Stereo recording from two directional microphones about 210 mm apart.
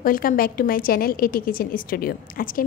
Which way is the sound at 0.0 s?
40° left (ahead or behind).